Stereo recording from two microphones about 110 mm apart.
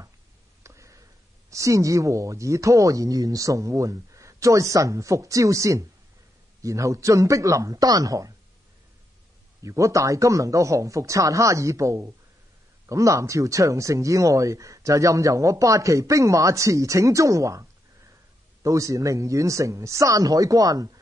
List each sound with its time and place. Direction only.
0.7 s a sound: 30° right (ahead or behind)
1.5 s speech: 30° right (ahead or behind)
9.6 s speech: 30° right (ahead or behind)